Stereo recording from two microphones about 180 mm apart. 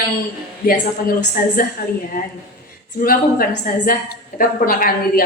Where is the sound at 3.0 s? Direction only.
55° left (ahead or behind).